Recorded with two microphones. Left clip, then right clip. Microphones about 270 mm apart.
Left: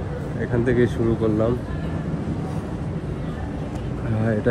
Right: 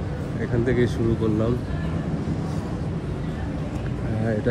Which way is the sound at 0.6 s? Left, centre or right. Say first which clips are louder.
Left 2 dB; centre.